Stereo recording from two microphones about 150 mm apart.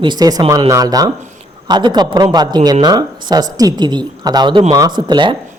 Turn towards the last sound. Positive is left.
turn(degrees=-30)  # may be behind; listen again after turning